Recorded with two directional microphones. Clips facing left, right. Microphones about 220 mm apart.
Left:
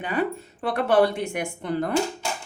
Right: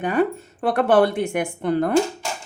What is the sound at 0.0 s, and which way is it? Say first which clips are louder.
Speech: right 5 dB; 45° right (ahead or behind).